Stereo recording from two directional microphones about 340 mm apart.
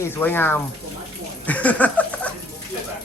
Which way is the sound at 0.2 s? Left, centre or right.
Centre.